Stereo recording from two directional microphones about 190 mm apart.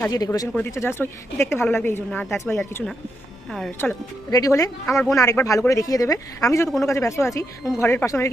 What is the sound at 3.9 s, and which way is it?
Speech, 15° left (ahead or behind).